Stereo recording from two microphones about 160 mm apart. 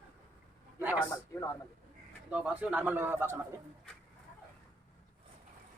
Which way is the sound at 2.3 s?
10° right (ahead or behind).